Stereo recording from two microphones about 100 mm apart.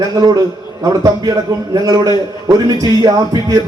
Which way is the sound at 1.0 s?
40° right (ahead or behind).